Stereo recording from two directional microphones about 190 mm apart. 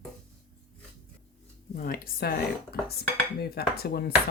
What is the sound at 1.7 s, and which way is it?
Speech, 50° left (ahead or behind).